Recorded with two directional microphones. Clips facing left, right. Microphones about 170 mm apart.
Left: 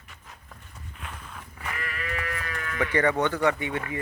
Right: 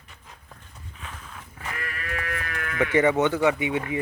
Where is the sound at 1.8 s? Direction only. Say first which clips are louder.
Even; 45° right (ahead or behind).